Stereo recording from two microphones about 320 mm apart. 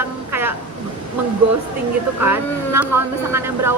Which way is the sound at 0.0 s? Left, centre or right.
Centre.